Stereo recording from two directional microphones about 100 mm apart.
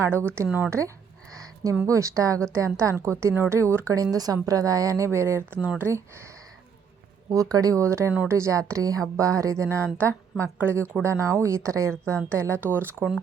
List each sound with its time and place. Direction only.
0.0 s a woman's voice: 25° right (ahead or behind)
0.4 s speech: 15° right (ahead or behind)
1.3 s a sound: 35° right (ahead or behind)
1.9 s a woman's voice: 30° right (ahead or behind); by 5.9 s 15° right (ahead or behind)
7.3 s a woman's voice: 35° right (ahead or behind); by 13.1 s 20° right (ahead or behind)